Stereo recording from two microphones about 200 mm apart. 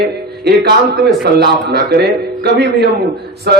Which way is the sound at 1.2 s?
55° right (ahead or behind).